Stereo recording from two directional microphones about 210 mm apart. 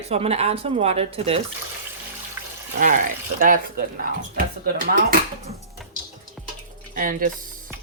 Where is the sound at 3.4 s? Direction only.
40° right (ahead or behind).